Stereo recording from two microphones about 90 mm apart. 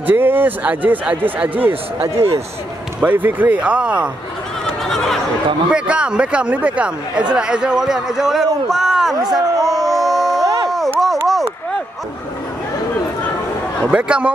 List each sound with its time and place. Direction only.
0.0 s a man's voice: 20° right (ahead or behind)
2.2 s a man's voice: 30° right (ahead or behind); by 4.1 s 10° right (ahead or behind)
4.6 s a sound: 5° left (ahead or behind)
5.7 s a man's voice: 10° right (ahead or behind)
9.7 s a sound: centre (ahead or behind)
13.9 s speech: 10° right (ahead or behind)